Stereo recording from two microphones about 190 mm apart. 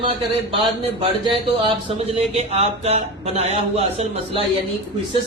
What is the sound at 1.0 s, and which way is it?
Speech, 25° right (ahead or behind).